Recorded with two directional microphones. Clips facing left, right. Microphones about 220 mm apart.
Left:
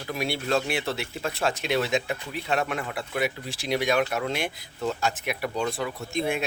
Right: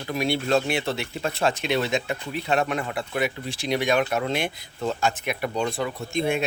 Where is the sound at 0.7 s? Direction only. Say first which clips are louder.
Right 2 dB; centre (ahead or behind).